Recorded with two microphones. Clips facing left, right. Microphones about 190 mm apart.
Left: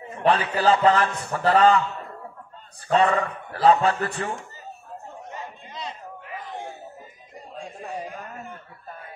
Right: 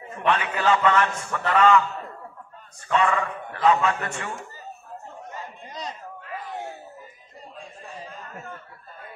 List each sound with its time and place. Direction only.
0.2 s a man's voice: 35° left (ahead or behind)
2.9 s a man's voice: 35° left (ahead or behind)
8.0 s a sound: 15° left (ahead or behind)